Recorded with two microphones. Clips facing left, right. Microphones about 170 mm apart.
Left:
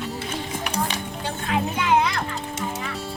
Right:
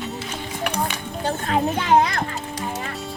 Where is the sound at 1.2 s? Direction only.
40° right (ahead or behind).